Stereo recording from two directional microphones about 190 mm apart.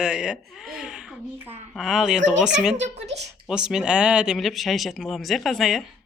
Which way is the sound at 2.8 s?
35° right (ahead or behind).